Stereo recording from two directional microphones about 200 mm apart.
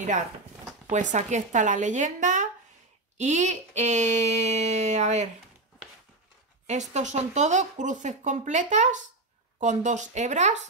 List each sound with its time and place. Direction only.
0.8 s speech: 40° right (ahead or behind)
6.7 s speech: 35° right (ahead or behind)